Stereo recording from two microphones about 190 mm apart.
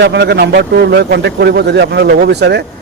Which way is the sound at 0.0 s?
65° right (ahead or behind).